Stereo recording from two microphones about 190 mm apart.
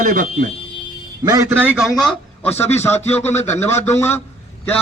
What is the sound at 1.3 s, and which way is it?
A man's voice, 15° right (ahead or behind).